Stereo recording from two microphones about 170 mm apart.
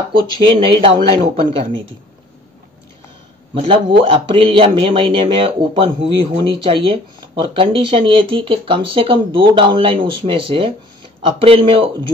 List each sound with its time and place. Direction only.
0.1 s speech: 30° right (ahead or behind)
3.5 s speech: 30° right (ahead or behind)